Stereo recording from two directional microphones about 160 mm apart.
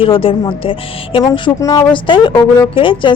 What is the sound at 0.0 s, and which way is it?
A woman's voice, 35° left (ahead or behind).